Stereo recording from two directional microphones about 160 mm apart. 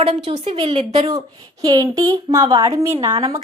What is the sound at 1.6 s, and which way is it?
Speech, 25° right (ahead or behind).